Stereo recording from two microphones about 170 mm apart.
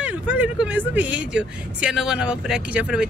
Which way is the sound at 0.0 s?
10° right (ahead or behind).